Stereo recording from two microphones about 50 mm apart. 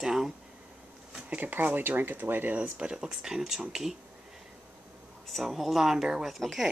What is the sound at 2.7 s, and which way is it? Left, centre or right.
Speech, centre.